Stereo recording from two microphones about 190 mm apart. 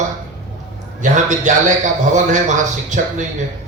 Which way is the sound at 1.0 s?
40° right (ahead or behind).